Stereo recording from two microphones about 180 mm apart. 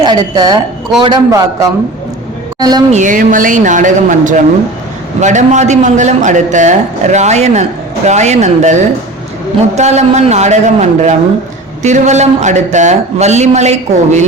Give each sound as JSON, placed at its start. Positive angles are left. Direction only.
{"t": 0.0, "sound": "a man's voice", "side_deg": -20}
{"t": 2.9, "sound": "a man's voice", "side_deg": -45}